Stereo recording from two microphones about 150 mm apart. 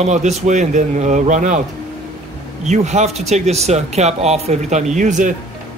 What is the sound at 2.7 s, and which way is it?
Speech, 50° right (ahead or behind).